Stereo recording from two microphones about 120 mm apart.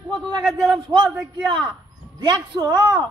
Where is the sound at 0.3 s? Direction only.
40° right (ahead or behind).